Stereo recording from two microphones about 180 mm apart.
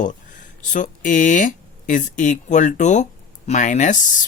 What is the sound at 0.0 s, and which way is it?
Speech, 45° left (ahead or behind).